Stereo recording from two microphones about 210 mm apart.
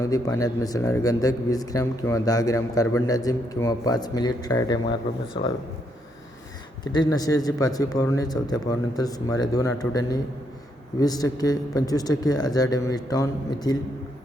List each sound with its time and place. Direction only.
0.0 s a man's voice: 15° left (ahead or behind)
6.8 s a man's voice: 20° left (ahead or behind)